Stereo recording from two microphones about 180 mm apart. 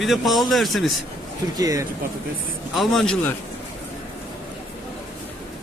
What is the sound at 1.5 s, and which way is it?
Speech, 20° right (ahead or behind).